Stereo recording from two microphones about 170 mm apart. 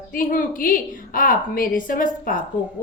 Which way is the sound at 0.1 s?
55° left (ahead or behind).